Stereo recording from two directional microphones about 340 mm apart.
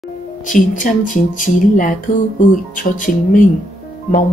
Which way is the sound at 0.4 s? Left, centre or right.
Left.